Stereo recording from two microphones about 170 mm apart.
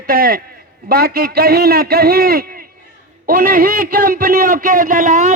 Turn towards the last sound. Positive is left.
turn(degrees=-50)  # may be behind; listen again after turning